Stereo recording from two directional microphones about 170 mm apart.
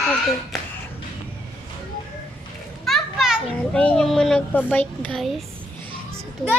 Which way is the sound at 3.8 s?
5° left (ahead or behind).